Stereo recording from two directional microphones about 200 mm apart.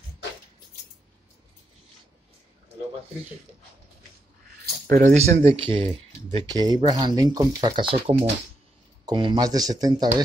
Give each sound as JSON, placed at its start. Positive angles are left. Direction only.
{"t": 4.8, "sound": "speech", "side_deg": -40}